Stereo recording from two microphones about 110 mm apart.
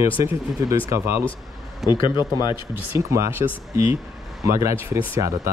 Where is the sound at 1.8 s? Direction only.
45° left (ahead or behind).